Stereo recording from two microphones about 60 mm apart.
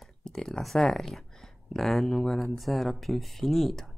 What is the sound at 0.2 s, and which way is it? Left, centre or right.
Speech, centre.